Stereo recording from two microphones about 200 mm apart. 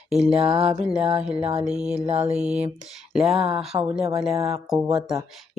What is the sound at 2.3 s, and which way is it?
Music, 5° right (ahead or behind).